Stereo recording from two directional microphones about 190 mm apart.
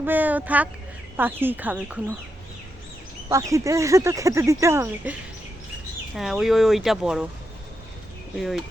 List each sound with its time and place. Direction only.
0.0 s speech: 10° right (ahead or behind)
3.3 s speech: 15° right (ahead or behind)
6.1 s speech: centre (ahead or behind)
8.4 s speech: centre (ahead or behind)